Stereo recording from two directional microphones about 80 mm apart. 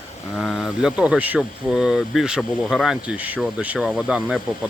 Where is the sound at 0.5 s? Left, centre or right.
Centre.